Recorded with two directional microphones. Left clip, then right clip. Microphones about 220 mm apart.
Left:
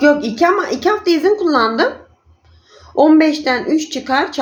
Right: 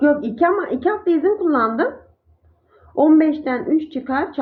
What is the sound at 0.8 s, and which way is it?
Speech, 10° left (ahead or behind).